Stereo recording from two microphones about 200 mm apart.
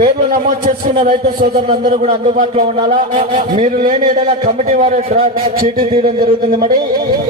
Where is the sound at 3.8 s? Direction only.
40° right (ahead or behind).